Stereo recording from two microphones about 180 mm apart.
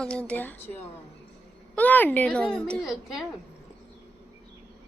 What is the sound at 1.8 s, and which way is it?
Speech, 10° left (ahead or behind).